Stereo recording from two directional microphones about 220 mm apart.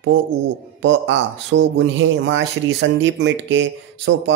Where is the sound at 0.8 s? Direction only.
55° right (ahead or behind).